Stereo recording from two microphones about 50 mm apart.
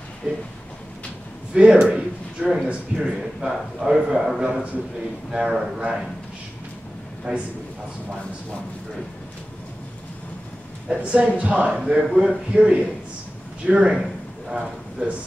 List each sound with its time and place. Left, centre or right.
0.2 s speech: centre
1.5 s a man's voice: right
7.3 s a man's voice: centre
10.9 s a man's voice: right